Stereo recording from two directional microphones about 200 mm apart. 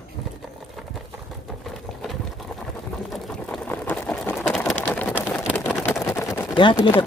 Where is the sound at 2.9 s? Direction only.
Centre (ahead or behind); by 6.9 s 25° left (ahead or behind).